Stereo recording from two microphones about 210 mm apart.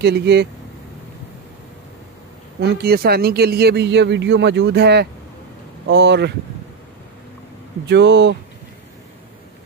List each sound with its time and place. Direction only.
0.0 s speech: 50° right (ahead or behind)
2.6 s speech: 50° right (ahead or behind)
7.8 s speech: 55° right (ahead or behind)